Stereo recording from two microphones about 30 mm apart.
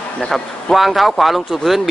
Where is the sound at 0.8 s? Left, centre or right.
Centre.